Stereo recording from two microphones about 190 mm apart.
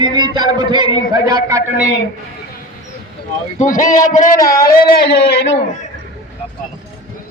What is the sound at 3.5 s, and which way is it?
Speech, 45° left (ahead or behind).